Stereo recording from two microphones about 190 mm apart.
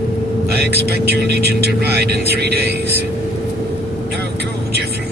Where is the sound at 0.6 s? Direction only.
60° right (ahead or behind).